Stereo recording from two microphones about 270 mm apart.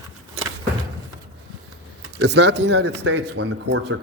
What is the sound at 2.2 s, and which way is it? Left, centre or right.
A man's voice, right.